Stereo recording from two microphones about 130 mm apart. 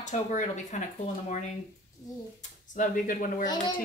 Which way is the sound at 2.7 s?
85° left.